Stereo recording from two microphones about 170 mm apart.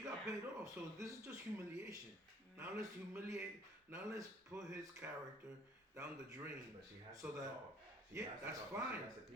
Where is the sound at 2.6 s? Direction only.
15° right (ahead or behind).